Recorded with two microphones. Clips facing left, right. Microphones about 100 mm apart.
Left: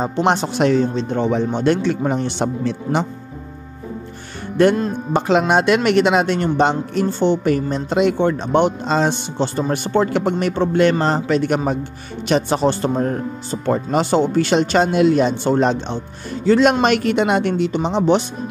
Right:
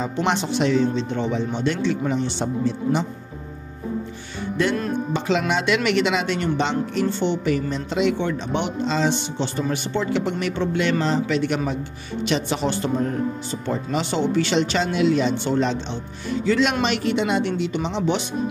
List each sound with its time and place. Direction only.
0.0 s speech: 40° left (ahead or behind); by 3.1 s 65° left (ahead or behind)
4.6 s a woman's voice: 55° left (ahead or behind)
17.7 s speech: 40° left (ahead or behind)